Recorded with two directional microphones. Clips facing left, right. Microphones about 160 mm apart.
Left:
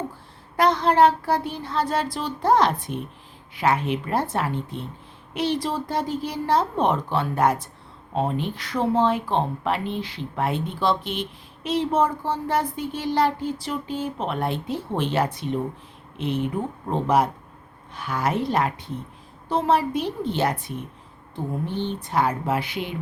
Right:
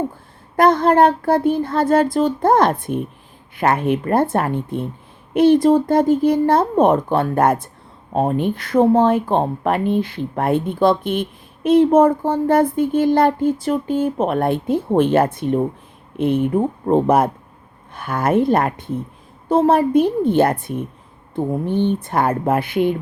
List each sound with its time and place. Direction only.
0.5 s speech: 50° right (ahead or behind)